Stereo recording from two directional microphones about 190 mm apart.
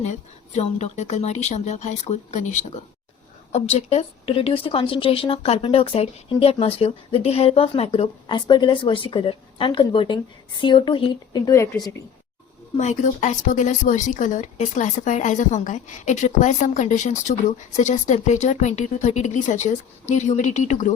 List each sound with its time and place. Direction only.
0.0 s a woman's voice: 35° left (ahead or behind); by 11.9 s 15° left (ahead or behind)
12.7 s speech: 35° left (ahead or behind)